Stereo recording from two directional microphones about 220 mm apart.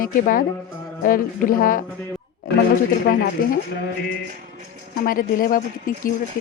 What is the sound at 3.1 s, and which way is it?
Speech, 45° left (ahead or behind).